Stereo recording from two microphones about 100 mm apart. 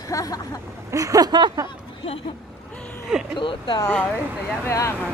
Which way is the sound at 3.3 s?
55° left (ahead or behind).